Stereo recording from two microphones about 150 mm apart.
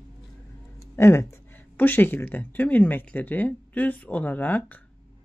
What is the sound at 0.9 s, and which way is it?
Speech, 20° left (ahead or behind).